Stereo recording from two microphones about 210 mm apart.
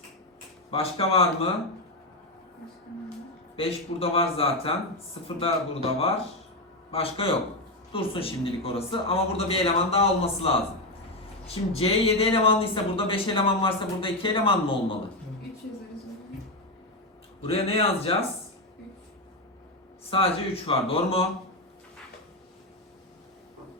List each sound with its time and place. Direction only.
0.7 s speech: 25° left (ahead or behind)
3.5 s speech: 25° left (ahead or behind)
17.4 s speech: 25° left (ahead or behind)
20.1 s speech: 25° left (ahead or behind)